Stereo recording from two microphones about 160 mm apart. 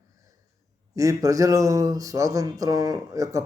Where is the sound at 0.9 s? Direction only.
20° right (ahead or behind).